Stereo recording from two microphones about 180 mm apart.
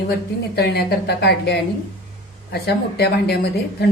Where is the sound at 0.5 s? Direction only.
65° left (ahead or behind).